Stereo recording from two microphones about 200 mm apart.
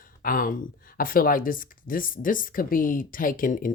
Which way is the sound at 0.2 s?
45° left (ahead or behind).